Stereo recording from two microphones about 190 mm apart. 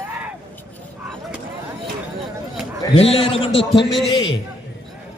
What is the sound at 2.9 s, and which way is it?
Speech, 30° left (ahead or behind).